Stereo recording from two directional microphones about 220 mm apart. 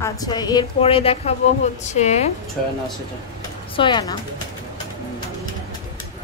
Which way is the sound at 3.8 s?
20° left (ahead or behind).